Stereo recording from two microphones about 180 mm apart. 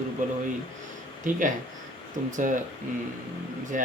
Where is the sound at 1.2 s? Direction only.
45° right (ahead or behind).